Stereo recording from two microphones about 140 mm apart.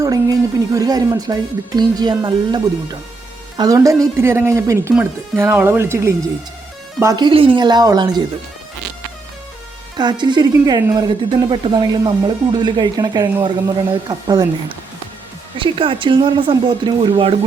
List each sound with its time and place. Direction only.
0.0 s speech: 25° right (ahead or behind)
7.3 s a woman's voice: 40° right (ahead or behind)
10.0 s a woman's voice: 35° right (ahead or behind)
15.5 s a woman's voice: 40° right (ahead or behind)